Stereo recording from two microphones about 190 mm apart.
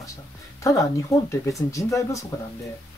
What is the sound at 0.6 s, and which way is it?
Speech, 15° left (ahead or behind).